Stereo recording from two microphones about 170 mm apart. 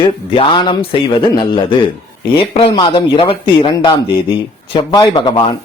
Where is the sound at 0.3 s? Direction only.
30° left (ahead or behind).